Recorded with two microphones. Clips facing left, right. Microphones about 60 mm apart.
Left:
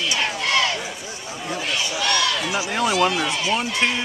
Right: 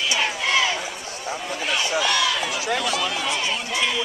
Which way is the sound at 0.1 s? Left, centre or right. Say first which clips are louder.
Even; centre.